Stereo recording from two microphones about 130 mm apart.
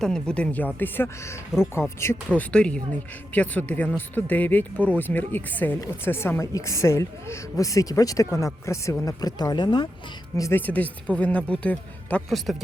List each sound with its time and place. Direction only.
0.0 s a woman's voice: 5° left (ahead or behind); by 9.9 s 35° left (ahead or behind)
10.3 s a woman's voice: 25° left (ahead or behind)
10.6 s speech: 10° left (ahead or behind)